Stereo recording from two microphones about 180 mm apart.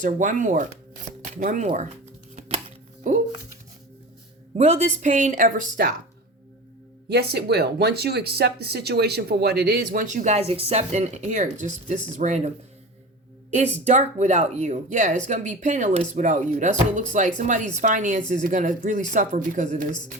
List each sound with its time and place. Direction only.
0.0 s speech: 45° right (ahead or behind)
2.3 s chopping: 40° right (ahead or behind)
4.5 s speech: 40° right (ahead or behind)
7.1 s speech: 65° right (ahead or behind); by 12.5 s 40° right (ahead or behind)
13.8 s speech: 40° right (ahead or behind)